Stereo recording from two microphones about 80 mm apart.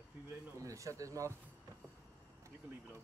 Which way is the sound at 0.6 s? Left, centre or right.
Right.